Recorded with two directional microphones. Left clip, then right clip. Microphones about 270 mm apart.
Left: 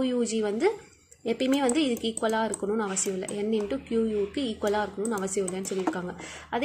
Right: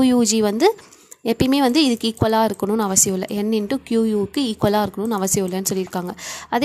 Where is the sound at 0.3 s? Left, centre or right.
Right.